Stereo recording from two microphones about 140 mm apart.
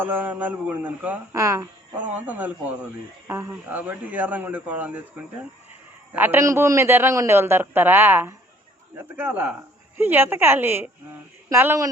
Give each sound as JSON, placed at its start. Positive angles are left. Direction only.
{"t": 0.0, "sound": "a man's voice", "side_deg": -15}
{"t": 1.4, "sound": "a man's voice", "side_deg": -20}